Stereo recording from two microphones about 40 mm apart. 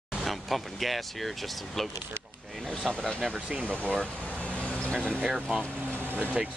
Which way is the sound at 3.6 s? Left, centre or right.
Left.